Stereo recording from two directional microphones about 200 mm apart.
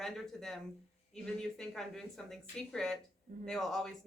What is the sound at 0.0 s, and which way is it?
A man's voice, centre (ahead or behind).